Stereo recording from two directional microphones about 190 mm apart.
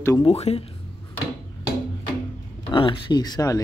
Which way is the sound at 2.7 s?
25° left (ahead or behind).